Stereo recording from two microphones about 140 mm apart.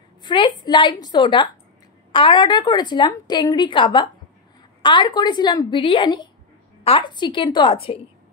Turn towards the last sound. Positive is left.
turn(degrees=40)  # may be behind; listen again after turning